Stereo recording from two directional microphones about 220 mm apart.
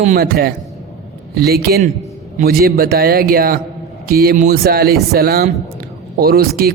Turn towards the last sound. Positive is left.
turn(degrees=-45)  # may be behind; listen again after turning